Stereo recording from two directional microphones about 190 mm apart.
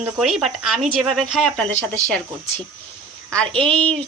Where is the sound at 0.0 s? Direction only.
Centre (ahead or behind).